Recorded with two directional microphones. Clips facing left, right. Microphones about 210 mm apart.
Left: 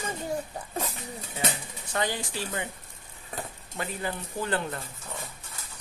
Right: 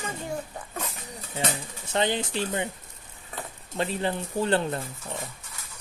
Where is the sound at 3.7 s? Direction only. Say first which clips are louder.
Right 6 dB; 25° right (ahead or behind).